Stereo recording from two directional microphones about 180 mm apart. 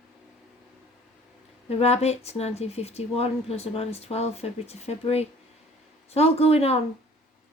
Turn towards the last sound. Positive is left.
turn(degrees=35)  # may be behind; listen again after turning